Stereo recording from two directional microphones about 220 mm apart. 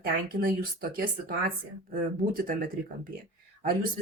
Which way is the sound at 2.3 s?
40° right (ahead or behind).